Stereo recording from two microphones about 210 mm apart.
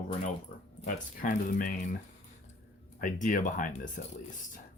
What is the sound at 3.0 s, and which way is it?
Speech, 40° left (ahead or behind).